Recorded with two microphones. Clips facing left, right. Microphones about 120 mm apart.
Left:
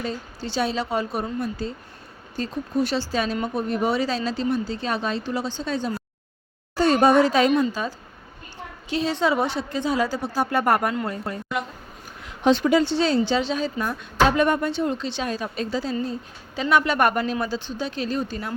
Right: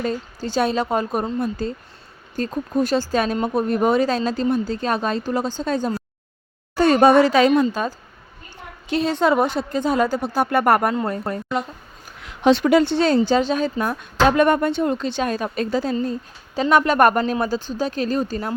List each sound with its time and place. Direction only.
0.0 s speech: 45° right (ahead or behind)
6.7 s a woman's voice: 55° right (ahead or behind); by 7.5 s 85° right
7.7 s a woman's voice: 50° right (ahead or behind)
12.2 s speech: 75° right (ahead or behind); by 18.5 s 40° right (ahead or behind)